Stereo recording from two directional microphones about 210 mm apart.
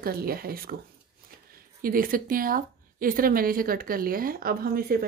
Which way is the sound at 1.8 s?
40° right (ahead or behind).